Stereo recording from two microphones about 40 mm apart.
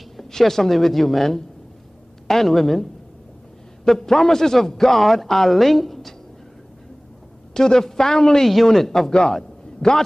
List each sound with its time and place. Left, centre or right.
0.2 s a man's voice: centre
7.5 s a woman's voice: centre